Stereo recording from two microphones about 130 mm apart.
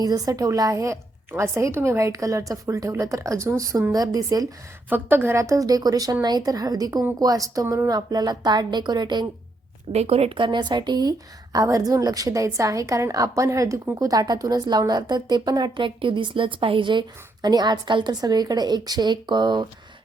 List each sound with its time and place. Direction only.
0.0 s a woman's voice: 30° right (ahead or behind)
4.9 s a woman's voice: 15° right (ahead or behind); by 9.2 s 35° right (ahead or behind)
9.9 s a woman's voice: 50° right (ahead or behind); by 19.6 s 35° right (ahead or behind)